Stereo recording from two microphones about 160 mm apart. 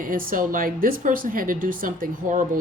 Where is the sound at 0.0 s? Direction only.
60° right (ahead or behind).